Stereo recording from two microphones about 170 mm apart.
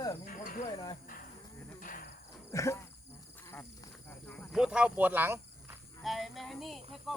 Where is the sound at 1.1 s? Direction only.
50° left (ahead or behind).